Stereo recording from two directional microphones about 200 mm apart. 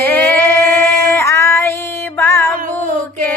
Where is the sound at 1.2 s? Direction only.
15° left (ahead or behind).